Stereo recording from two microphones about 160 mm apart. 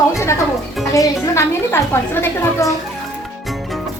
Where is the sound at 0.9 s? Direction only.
20° left (ahead or behind).